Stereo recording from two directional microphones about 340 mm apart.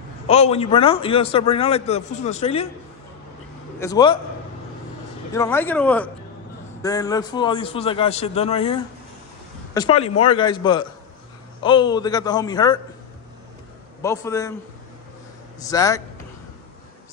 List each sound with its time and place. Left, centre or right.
0.3 s a man's voice: centre
3.8 s a man's voice: centre
5.3 s a man's voice: centre
9.8 s a man's voice: centre
14.0 s a man's voice: centre
15.6 s a man's voice: centre